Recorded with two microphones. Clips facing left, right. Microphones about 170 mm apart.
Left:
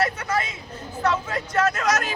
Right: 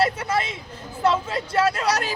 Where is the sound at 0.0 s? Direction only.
30° right (ahead or behind).